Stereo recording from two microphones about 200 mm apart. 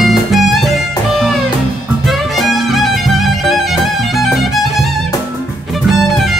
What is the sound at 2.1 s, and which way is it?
Music, centre (ahead or behind).